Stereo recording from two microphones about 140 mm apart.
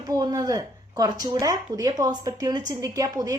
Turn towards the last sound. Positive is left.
turn(degrees=-25)  # may be behind; listen again after turning